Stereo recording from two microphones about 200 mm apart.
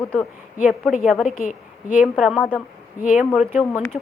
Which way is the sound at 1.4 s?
40° left (ahead or behind).